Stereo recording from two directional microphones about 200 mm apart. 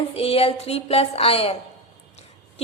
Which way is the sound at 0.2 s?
30° left (ahead or behind).